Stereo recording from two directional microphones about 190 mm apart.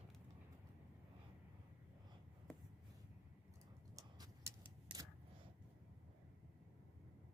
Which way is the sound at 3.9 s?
20° right (ahead or behind).